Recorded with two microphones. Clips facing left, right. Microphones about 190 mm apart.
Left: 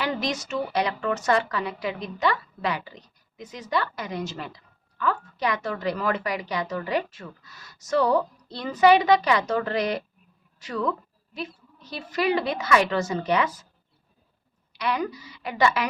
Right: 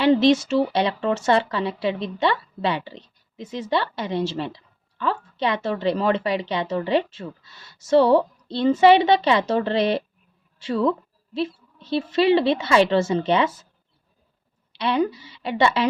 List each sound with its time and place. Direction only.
0.0 s speech: 30° right (ahead or behind)
14.7 s speech: 25° right (ahead or behind)